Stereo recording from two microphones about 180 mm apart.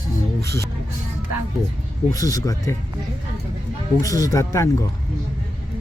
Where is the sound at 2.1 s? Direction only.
20° left (ahead or behind).